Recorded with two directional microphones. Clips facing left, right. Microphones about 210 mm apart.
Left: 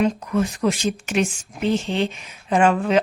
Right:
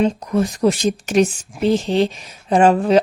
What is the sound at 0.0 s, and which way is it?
A woman's voice, 35° right (ahead or behind).